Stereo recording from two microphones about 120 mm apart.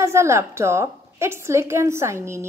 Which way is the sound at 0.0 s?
25° right (ahead or behind).